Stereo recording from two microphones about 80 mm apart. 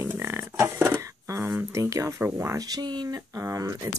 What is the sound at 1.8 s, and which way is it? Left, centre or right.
Speech, right.